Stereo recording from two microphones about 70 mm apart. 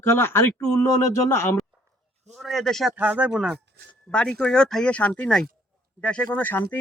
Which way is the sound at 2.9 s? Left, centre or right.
Centre.